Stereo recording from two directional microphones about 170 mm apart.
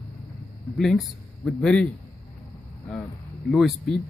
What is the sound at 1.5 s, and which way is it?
Speech, 5° left (ahead or behind).